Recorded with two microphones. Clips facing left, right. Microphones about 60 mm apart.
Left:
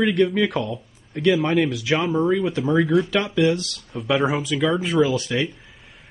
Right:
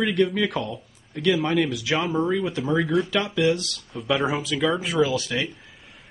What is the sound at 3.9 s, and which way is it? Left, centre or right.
Speech, centre.